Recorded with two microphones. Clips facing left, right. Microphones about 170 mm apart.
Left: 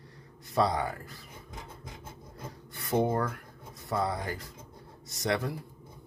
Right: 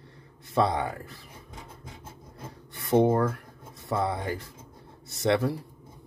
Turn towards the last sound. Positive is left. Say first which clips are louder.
# right 6 dB
turn(degrees=-30)  # may be behind; listen again after turning